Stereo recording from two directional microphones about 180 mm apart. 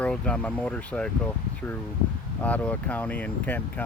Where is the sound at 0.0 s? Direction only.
5° left (ahead or behind).